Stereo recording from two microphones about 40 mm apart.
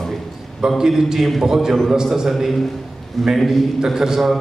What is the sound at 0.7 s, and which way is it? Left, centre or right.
A man's voice, centre.